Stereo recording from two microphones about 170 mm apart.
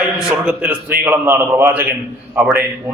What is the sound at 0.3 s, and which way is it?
A man's voice, 5° right (ahead or behind).